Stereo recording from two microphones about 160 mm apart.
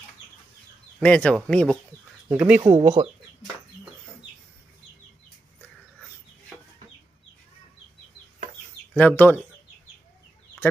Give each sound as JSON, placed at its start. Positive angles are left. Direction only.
{"t": 1.0, "sound": "speech", "side_deg": 5}
{"t": 2.2, "sound": "speech", "side_deg": -10}
{"t": 2.6, "sound": "speech", "side_deg": -20}
{"t": 8.9, "sound": "speech", "side_deg": 10}